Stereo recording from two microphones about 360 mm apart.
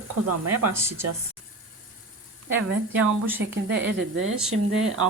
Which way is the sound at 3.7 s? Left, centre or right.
Right.